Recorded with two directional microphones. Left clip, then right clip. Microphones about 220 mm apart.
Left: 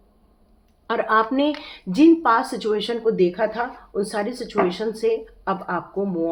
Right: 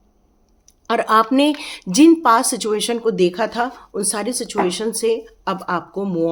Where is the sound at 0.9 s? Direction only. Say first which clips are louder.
Right 4 dB; 35° right (ahead or behind).